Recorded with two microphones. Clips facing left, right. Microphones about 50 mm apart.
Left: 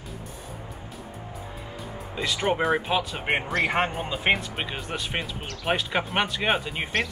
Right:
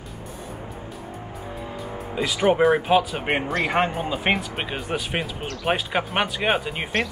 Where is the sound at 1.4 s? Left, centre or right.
Centre.